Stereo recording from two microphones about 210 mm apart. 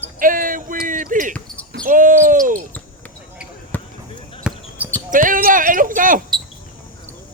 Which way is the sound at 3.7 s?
10° left (ahead or behind).